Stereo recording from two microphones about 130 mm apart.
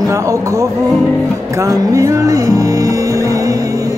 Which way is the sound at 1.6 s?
25° right (ahead or behind).